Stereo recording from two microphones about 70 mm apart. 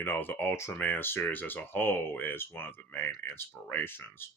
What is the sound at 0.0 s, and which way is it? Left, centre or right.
Speech, left.